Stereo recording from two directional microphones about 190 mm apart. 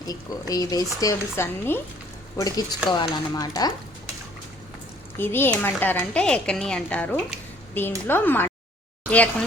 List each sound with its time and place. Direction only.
0.0 s speech: 20° left (ahead or behind)
5.1 s a woman's voice: 10° left (ahead or behind)